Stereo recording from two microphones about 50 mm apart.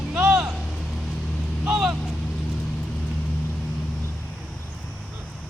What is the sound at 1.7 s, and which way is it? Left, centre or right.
Vehicle, centre.